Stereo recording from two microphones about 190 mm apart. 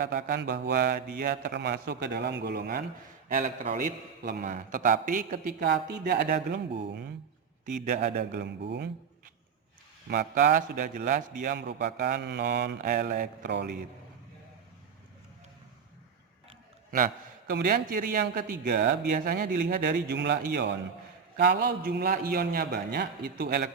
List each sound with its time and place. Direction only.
0.0 s a man's voice: 55° right (ahead or behind)
3.3 s a man's voice: 35° right (ahead or behind)
3.8 s a man's voice: 50° right (ahead or behind)
4.4 s a man's voice: 40° right (ahead or behind)
5.6 s a man's voice: 60° right (ahead or behind)
7.9 s a man's voice: 50° right (ahead or behind)
8.2 s a man's voice: 65° right (ahead or behind)
10.3 s a man's voice: 45° right (ahead or behind)
11.5 s a man's voice: 65° right (ahead or behind)
12.8 s a man's voice: 50° right (ahead or behind)
16.9 s a man's voice: 50° right (ahead or behind)